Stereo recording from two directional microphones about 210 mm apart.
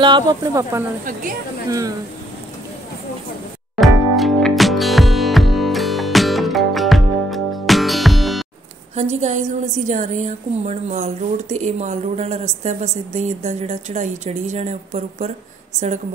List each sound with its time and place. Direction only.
0.0 s speech: 20° right (ahead or behind)
3.7 s music: centre (ahead or behind)
9.1 s a woman's voice: 35° right (ahead or behind)